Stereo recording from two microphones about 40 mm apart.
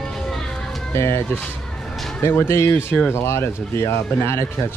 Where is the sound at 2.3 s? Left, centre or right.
Left.